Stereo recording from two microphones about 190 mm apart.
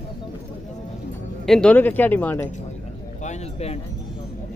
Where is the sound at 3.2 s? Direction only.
35° left (ahead or behind).